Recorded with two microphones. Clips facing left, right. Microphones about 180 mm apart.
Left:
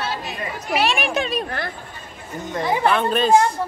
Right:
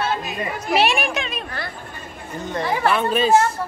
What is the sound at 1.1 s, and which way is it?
Speech, 40° left (ahead or behind).